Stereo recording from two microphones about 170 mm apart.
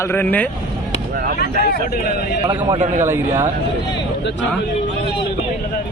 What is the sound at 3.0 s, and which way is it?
Speech, 15° right (ahead or behind).